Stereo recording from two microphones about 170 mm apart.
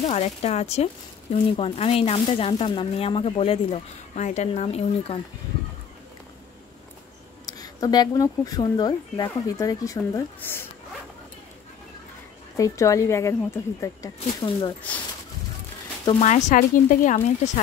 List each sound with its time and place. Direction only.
0.0 s speech: 40° left (ahead or behind)
7.4 s speech: 20° left (ahead or behind)
12.5 s speech: 20° left (ahead or behind)
16.2 s speech: 45° left (ahead or behind)